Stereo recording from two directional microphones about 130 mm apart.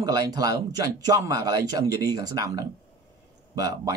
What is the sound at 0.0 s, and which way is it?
Speech, 30° right (ahead or behind).